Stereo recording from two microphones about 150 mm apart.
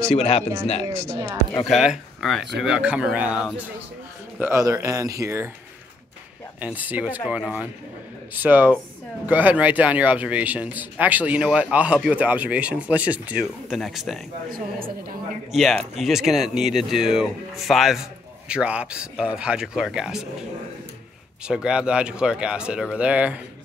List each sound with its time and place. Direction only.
0.1 s speech: 45° left (ahead or behind)
1.0 s speech: 20° right (ahead or behind)
1.7 s speech: centre (ahead or behind)
4.4 s speech: 20° right (ahead or behind)
6.6 s speech: 10° right (ahead or behind)
15.5 s speech: centre (ahead or behind)
21.5 s speech: 5° right (ahead or behind)